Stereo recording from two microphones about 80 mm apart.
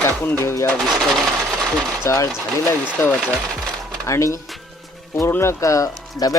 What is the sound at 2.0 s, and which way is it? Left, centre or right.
Speech, left.